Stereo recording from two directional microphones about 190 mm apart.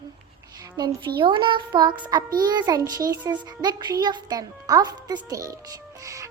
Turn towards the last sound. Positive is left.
turn(degrees=-15)  # may be behind; listen again after turning